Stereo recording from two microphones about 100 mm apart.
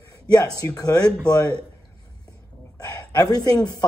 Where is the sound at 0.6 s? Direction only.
40° left (ahead or behind).